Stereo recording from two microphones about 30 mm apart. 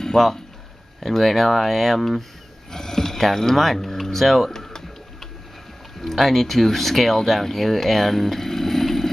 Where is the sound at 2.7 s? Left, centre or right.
Centre.